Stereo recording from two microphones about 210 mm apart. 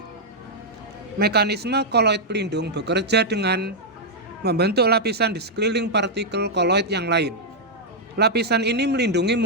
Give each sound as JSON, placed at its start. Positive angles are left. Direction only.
{"t": 1.2, "sound": "speech", "side_deg": -50}